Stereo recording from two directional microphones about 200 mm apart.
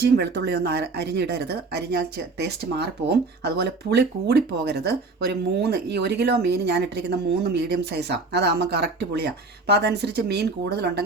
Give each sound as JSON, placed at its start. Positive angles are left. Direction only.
{"t": 0.0, "sound": "speech", "side_deg": -55}